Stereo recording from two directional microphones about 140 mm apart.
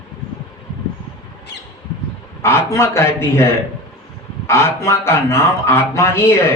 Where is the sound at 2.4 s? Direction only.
20° left (ahead or behind).